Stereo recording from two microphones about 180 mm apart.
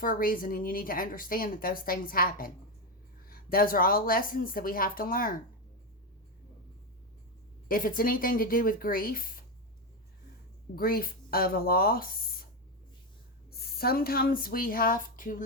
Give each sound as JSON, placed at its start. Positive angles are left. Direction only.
{"t": 0.0, "sound": "a woman's voice", "side_deg": 50}
{"t": 7.7, "sound": "a woman's voice", "side_deg": 50}
{"t": 10.8, "sound": "speech", "side_deg": 55}
{"t": 13.5, "sound": "speech", "side_deg": 55}